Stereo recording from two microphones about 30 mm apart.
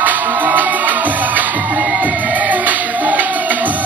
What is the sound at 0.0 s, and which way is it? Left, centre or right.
Music, right.